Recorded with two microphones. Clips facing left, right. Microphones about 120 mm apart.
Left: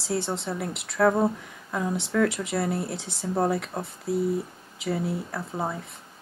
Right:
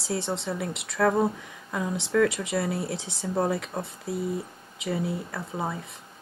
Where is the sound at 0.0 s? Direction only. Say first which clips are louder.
Left 1 dB; centre (ahead or behind).